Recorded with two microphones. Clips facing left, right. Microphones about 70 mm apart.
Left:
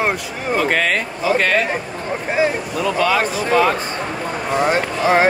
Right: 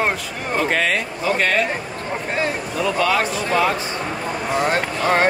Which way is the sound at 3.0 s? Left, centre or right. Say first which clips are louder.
Left 3 dB; left.